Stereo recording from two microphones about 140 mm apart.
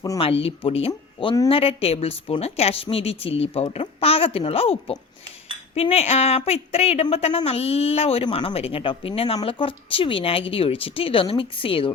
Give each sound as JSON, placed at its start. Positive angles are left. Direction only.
{"t": 0.2, "sound": "a woman's voice", "side_deg": 40}